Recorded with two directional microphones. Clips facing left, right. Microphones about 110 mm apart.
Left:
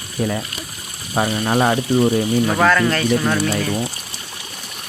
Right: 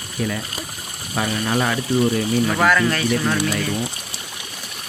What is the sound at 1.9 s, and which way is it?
Speech, 20° left (ahead or behind).